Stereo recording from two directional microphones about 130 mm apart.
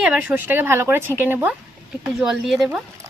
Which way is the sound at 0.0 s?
10° right (ahead or behind).